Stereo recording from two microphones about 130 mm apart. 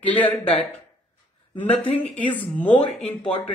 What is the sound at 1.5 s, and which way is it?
Speech, 15° left (ahead or behind).